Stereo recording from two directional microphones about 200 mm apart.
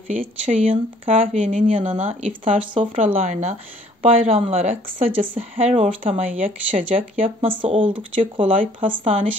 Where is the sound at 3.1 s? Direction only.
35° right (ahead or behind).